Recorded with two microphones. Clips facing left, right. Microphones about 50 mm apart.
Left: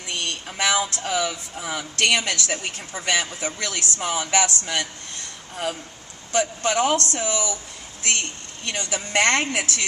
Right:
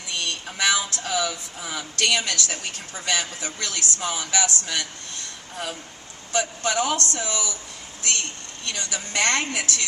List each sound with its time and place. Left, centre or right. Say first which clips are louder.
0.1 s a man's voice: even; left
6.3 s speech: left 2 dB; left
8.6 s a man's voice: left 3 dB; left